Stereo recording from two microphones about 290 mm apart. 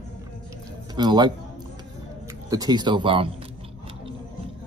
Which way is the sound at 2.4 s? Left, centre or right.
Centre.